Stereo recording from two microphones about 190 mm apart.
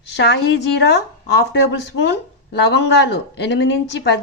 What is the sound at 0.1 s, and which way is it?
A woman's voice, 65° left (ahead or behind).